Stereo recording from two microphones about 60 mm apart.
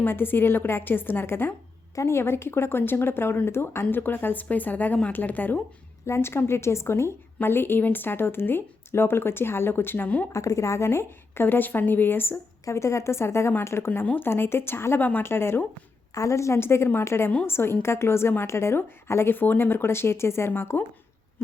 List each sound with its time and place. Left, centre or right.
0.0 s speech: left
2.0 s speech: left
6.1 s speech: left
10.3 s speech: left
12.7 s speech: left
14.0 s speech: left
14.3 s speech: left
16.1 s speech: left
20.5 s speech: left